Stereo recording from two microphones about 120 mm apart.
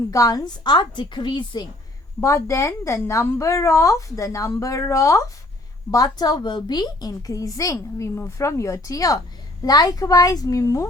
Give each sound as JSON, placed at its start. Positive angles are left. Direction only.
{"t": 0.1, "sound": "a woman's voice", "side_deg": 30}
{"t": 2.2, "sound": "a woman's voice", "side_deg": 25}